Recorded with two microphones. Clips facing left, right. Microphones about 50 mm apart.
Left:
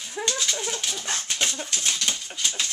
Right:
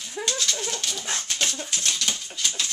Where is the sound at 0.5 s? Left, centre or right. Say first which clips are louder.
Even; centre.